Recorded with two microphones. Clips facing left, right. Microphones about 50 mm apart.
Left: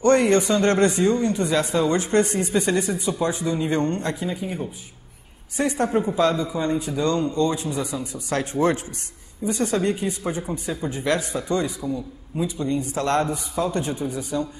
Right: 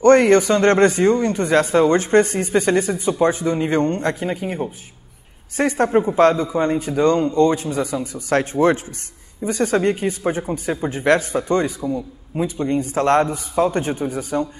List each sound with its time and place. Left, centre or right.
0.0 s a man's voice: right
4.1 s speech: right
5.6 s a man's voice: right